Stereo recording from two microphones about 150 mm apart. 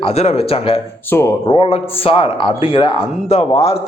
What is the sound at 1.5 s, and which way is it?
A man's voice, 40° left (ahead or behind).